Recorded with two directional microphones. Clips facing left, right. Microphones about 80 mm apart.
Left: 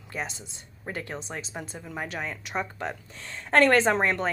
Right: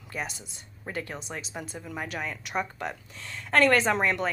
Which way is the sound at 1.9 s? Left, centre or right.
Centre.